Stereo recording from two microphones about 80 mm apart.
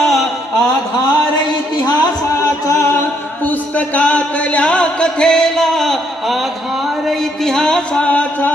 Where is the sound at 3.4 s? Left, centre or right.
Left.